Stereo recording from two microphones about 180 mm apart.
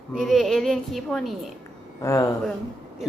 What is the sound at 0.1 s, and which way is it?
A woman's voice, centre (ahead or behind).